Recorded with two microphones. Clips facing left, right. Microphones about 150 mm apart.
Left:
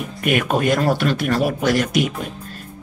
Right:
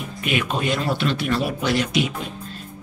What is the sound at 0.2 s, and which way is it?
Speech, 50° left (ahead or behind).